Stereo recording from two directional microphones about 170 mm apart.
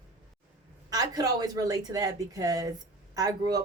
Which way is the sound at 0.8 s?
20° right (ahead or behind).